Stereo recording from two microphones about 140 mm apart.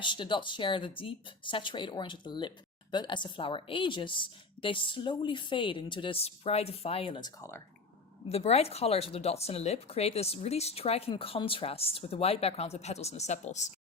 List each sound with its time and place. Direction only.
0.0 s a woman's voice: 35° left (ahead or behind)
8.3 s speech: 45° left (ahead or behind)